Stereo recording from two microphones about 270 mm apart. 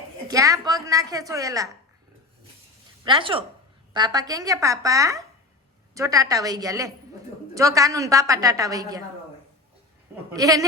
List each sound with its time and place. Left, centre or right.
0.3 s a woman's voice: centre
3.0 s a woman's voice: centre
10.3 s a woman's voice: centre